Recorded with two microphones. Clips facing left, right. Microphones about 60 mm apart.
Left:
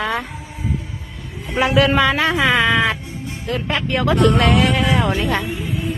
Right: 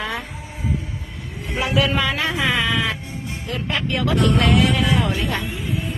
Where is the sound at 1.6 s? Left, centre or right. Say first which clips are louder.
Left 5 dB; left.